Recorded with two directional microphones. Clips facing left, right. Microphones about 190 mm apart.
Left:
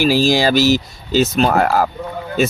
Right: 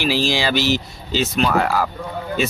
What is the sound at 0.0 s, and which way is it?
Speech, 45° left (ahead or behind).